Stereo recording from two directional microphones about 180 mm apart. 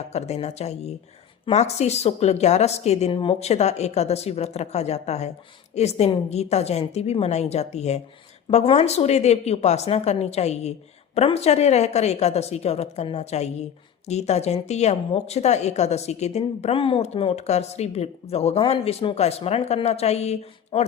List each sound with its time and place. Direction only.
0.1 s speech: 35° left (ahead or behind)